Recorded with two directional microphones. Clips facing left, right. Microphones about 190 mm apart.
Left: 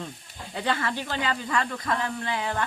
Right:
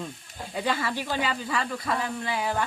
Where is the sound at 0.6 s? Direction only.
10° right (ahead or behind).